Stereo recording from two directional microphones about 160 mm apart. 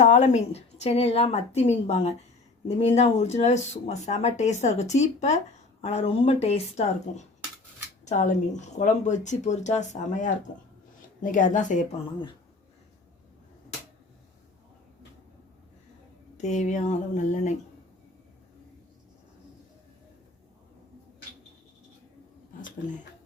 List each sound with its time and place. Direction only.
0.0 s a woman's voice: 45° left (ahead or behind)
16.4 s speech: 50° left (ahead or behind)